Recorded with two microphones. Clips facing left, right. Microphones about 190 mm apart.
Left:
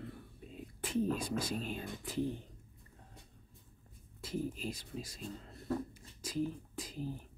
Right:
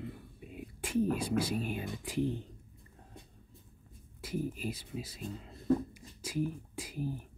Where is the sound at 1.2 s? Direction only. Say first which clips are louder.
Right 5 dB; 65° right (ahead or behind).